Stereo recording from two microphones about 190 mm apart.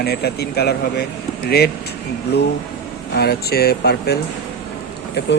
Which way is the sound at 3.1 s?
55° left (ahead or behind).